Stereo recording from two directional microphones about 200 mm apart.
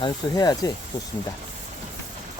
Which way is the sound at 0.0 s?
20° left (ahead or behind).